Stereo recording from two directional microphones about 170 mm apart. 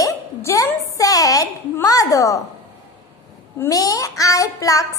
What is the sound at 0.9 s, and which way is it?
A child's voice, 20° left (ahead or behind).